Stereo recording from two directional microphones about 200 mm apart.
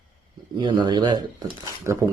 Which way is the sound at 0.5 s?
20° right (ahead or behind).